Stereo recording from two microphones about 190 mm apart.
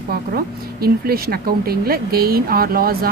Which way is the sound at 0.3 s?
55° right (ahead or behind).